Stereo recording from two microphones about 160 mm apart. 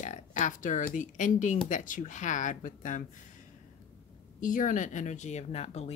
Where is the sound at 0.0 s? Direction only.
50° left (ahead or behind).